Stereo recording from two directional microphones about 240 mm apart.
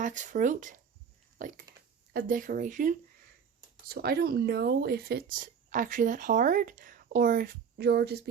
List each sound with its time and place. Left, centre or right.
0.0 s speech: right